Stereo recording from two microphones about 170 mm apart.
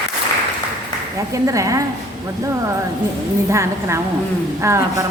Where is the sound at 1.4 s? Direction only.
20° right (ahead or behind).